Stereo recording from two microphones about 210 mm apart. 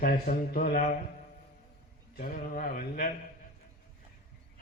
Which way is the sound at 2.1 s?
45° left (ahead or behind).